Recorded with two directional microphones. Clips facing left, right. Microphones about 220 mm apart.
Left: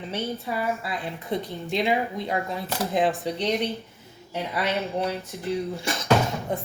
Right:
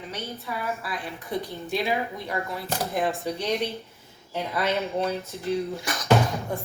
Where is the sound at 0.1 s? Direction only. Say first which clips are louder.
Left 6 dB; 25° left (ahead or behind).